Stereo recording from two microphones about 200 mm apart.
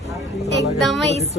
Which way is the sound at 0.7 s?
Centre (ahead or behind).